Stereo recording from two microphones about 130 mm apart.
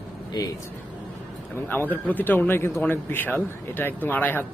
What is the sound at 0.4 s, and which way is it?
Speech, 30° left (ahead or behind).